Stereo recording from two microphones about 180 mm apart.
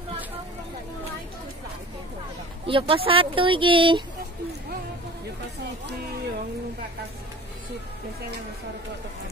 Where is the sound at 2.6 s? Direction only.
30° right (ahead or behind).